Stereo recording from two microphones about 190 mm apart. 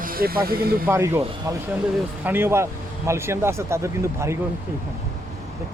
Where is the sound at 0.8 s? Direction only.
10° right (ahead or behind).